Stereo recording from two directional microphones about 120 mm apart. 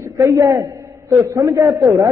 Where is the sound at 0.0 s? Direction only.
25° right (ahead or behind).